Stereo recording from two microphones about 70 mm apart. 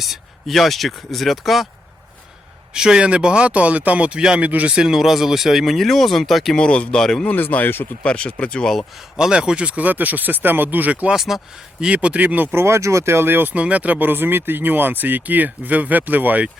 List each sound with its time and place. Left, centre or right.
0.0 s speech: centre
2.7 s speech: centre
6.6 s speech: centre
7.3 s speech: left
8.0 s speech: centre
9.1 s speech: centre
11.1 s speech: centre
11.8 s speech: centre